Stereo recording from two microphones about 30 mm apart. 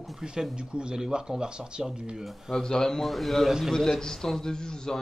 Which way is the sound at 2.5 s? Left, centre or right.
Left.